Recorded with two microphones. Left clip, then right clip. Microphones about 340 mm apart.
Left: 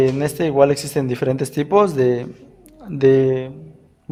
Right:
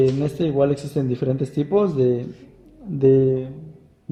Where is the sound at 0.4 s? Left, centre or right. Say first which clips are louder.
Left 6 dB; left.